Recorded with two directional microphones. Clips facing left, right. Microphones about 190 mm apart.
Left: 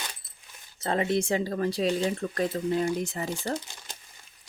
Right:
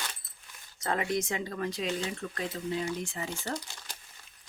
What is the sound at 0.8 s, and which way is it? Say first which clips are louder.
Speech: left 4 dB; 25° left (ahead or behind).